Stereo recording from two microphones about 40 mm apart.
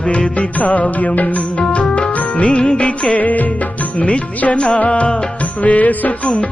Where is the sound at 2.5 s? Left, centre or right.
Left.